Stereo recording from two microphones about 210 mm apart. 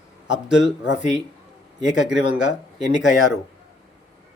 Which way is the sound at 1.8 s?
5° right (ahead or behind).